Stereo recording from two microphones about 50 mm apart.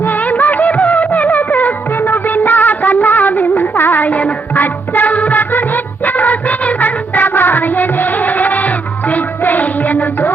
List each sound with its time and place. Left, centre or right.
0.0 s music: left